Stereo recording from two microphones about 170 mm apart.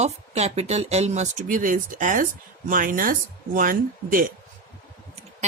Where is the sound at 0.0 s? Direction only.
40° right (ahead or behind); by 4.3 s 55° right (ahead or behind).